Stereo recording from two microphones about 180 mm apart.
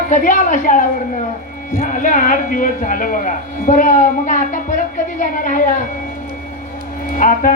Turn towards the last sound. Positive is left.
turn(degrees=45)  # may be behind; listen again after turning